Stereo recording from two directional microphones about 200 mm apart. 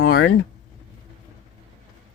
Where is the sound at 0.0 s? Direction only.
50° left (ahead or behind).